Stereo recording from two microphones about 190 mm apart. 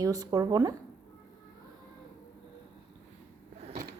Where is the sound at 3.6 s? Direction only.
45° right (ahead or behind).